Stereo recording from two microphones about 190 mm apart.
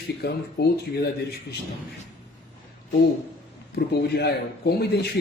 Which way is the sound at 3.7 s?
55° left (ahead or behind).